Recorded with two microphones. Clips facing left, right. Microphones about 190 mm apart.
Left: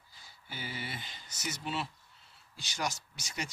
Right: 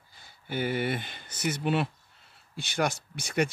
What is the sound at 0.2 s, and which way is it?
Speech, 60° right (ahead or behind).